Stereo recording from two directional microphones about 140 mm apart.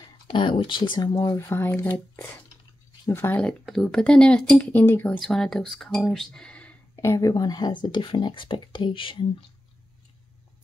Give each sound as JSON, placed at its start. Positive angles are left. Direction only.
{"t": 0.0, "sound": "speech", "side_deg": 35}
{"t": 1.1, "sound": "speech", "side_deg": 20}
{"t": 7.0, "sound": "speech", "side_deg": 20}